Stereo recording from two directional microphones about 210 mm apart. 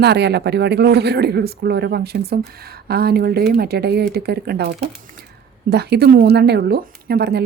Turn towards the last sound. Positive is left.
turn(degrees=-50)  # may be behind; listen again after turning